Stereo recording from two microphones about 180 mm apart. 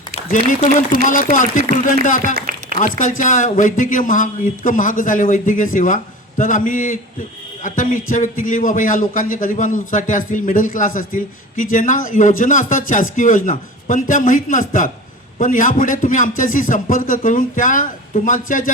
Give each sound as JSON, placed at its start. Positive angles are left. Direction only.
{"t": 0.3, "sound": "a man's voice", "side_deg": 50}
{"t": 2.3, "sound": "a sound", "side_deg": -50}
{"t": 2.8, "sound": "a man's voice", "side_deg": 50}